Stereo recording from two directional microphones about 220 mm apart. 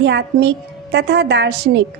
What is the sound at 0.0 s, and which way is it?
A woman's voice, 50° right (ahead or behind).